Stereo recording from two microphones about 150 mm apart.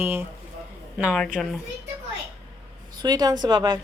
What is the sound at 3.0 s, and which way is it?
Speech, 25° right (ahead or behind).